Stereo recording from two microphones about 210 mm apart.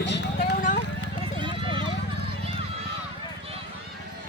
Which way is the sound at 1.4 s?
25° right (ahead or behind).